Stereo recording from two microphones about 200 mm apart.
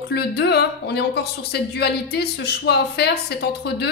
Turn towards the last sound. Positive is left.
turn(degrees=55)  # may be behind; listen again after turning